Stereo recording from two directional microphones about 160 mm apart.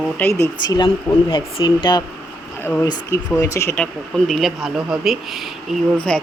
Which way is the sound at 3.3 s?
20° left (ahead or behind).